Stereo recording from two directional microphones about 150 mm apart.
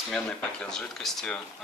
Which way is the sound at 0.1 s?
5° left (ahead or behind).